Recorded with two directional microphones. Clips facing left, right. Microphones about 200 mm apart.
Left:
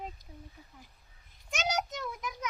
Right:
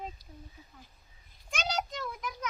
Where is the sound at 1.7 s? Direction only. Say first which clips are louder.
Left 1 dB; 15° left (ahead or behind).